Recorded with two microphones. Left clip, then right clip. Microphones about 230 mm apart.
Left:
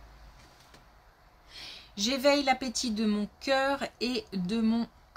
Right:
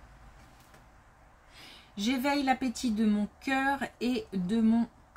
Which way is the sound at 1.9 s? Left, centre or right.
Left.